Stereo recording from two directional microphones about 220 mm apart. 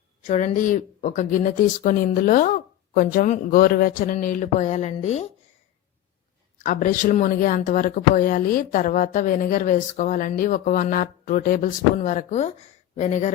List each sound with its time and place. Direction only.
0.3 s speech: 35° left (ahead or behind)
6.6 s speech: 35° left (ahead or behind)